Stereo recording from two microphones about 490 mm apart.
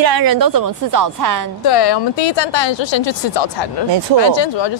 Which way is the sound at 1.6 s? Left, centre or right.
Left.